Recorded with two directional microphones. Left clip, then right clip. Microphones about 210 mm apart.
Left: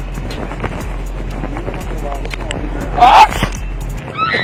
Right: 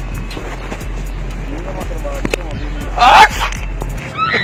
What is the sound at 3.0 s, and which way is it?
Speech, 50° right (ahead or behind).